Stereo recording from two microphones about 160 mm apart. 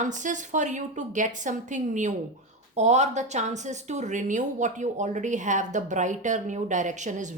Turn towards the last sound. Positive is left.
turn(degrees=-50)  # may be behind; listen again after turning